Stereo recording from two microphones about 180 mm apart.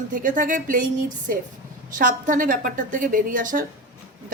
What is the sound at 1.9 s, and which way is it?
A woman's voice, 45° right (ahead or behind).